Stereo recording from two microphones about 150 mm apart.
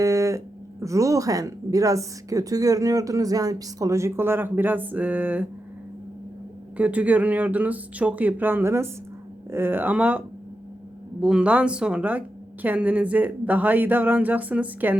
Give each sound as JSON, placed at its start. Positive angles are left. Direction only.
{"t": 0.0, "sound": "speech", "side_deg": -20}
{"t": 6.7, "sound": "speech", "side_deg": -10}